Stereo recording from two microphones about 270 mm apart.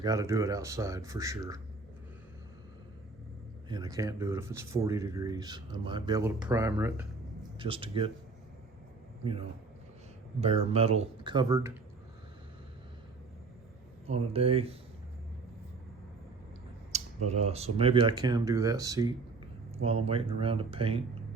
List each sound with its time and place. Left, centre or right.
0.0 s speech: centre
3.7 s speech: centre
7.4 s speech: centre
9.2 s speech: right
14.1 s speech: right
16.9 s speech: right